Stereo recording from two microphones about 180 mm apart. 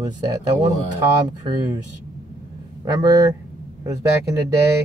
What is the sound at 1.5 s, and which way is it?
Speech, 25° right (ahead or behind).